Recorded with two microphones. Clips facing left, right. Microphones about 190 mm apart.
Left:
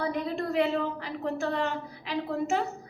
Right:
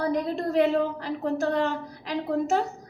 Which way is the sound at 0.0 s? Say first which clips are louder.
Right 4 dB; 40° right (ahead or behind).